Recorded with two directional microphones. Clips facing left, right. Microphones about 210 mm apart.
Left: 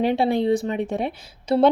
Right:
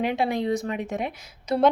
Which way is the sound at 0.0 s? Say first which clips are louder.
Left 5 dB; 30° left (ahead or behind).